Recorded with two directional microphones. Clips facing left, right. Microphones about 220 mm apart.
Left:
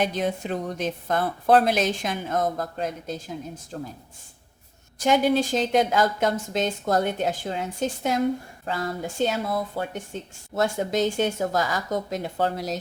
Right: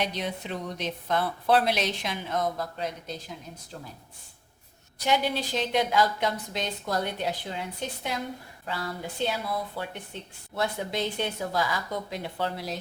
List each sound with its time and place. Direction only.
0.0 s a woman's voice: 50° left (ahead or behind)
4.9 s a woman's voice: 50° left (ahead or behind)